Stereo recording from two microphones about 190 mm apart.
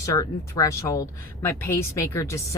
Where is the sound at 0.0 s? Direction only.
20° left (ahead or behind).